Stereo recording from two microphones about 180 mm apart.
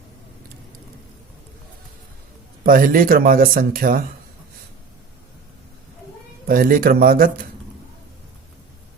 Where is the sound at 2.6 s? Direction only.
50° right (ahead or behind).